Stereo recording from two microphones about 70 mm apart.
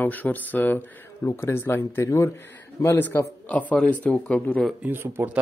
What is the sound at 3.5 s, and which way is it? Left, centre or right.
Speech, centre.